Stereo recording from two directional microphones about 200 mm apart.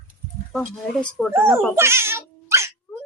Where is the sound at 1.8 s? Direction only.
10° right (ahead or behind).